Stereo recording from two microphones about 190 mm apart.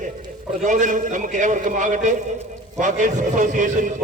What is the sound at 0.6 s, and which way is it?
A man's voice, 40° right (ahead or behind).